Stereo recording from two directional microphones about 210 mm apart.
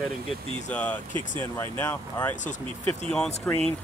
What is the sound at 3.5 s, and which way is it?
Speech, 5° left (ahead or behind).